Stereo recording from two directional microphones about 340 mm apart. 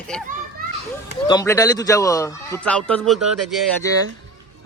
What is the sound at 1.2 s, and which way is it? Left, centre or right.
A man's voice, centre.